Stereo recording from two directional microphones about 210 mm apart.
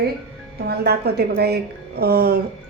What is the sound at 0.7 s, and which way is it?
A woman's voice, 50° right (ahead or behind).